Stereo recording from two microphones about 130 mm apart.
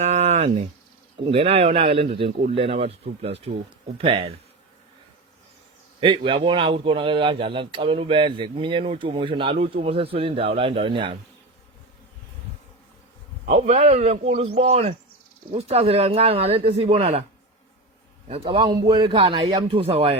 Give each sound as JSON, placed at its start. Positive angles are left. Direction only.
{"t": 0.0, "sound": "a sound", "side_deg": -60}
{"t": 1.3, "sound": "a man's voice", "side_deg": -50}
{"t": 6.0, "sound": "a man's voice", "side_deg": -45}
{"t": 13.4, "sound": "a man's voice", "side_deg": -70}
{"t": 18.7, "sound": "a man's voice", "side_deg": -35}